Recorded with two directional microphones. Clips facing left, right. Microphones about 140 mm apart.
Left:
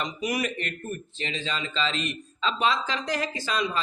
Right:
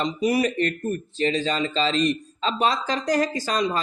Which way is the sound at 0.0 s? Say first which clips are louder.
Right 7 dB; 35° right (ahead or behind).